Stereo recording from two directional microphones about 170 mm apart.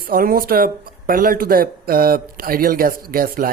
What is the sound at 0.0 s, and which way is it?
Speech, 55° right (ahead or behind).